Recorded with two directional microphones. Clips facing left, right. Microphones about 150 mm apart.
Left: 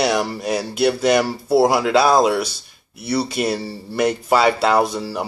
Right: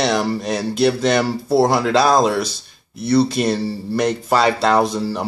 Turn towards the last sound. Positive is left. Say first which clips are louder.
# right 1 dB
turn(degrees=5)  # may be behind; listen again after turning